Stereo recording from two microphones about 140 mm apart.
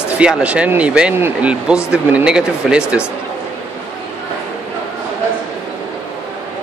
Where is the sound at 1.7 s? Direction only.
20° left (ahead or behind).